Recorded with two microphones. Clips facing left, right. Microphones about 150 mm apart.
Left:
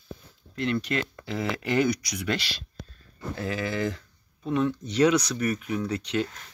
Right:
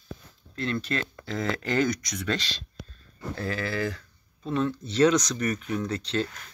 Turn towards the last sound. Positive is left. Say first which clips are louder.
# left 1 dB
turn(degrees=15)  # may be behind; listen again after turning